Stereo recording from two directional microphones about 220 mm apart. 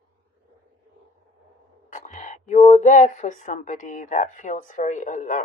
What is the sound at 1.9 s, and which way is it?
Speech, 35° left (ahead or behind).